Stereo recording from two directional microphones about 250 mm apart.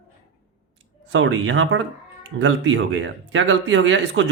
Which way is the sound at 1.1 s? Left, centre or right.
Right.